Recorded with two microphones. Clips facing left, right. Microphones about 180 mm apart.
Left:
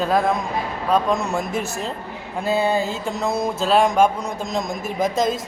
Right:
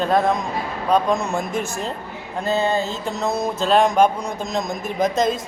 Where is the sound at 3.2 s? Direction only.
25° right (ahead or behind).